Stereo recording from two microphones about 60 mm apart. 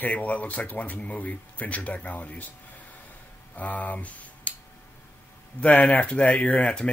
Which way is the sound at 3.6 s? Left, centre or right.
Left.